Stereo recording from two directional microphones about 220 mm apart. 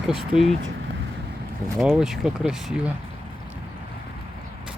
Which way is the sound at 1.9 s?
5° right (ahead or behind).